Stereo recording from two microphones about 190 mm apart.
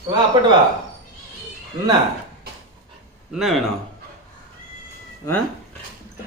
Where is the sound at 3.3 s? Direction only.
Centre (ahead or behind).